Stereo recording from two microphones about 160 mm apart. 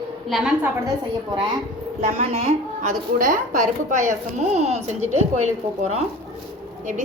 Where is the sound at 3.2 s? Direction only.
60° right (ahead or behind).